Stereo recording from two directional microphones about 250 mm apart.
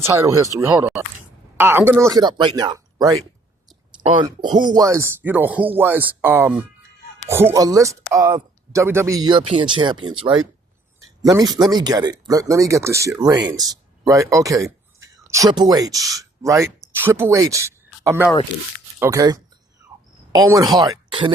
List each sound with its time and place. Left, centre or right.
0.0 s speech: centre
11.2 s speech: centre